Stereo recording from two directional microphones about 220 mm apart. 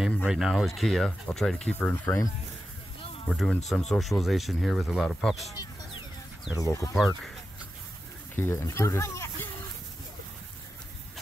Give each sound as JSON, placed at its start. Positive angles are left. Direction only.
{"t": 0.0, "sound": "speech", "side_deg": 0}
{"t": 3.3, "sound": "speech", "side_deg": 0}
{"t": 5.5, "sound": "a sound", "side_deg": 15}
{"t": 6.6, "sound": "speech", "side_deg": 15}
{"t": 8.4, "sound": "speech", "side_deg": 10}